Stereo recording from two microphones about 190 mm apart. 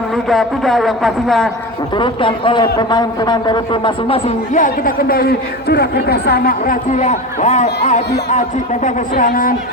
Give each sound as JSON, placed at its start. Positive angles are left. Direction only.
{"t": 0.3, "sound": "speech", "side_deg": 0}
{"t": 2.0, "sound": "a man's voice", "side_deg": 25}
{"t": 4.5, "sound": "speech", "side_deg": 45}